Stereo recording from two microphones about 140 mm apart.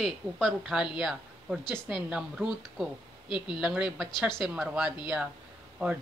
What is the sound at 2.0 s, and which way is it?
Speech, 5° right (ahead or behind).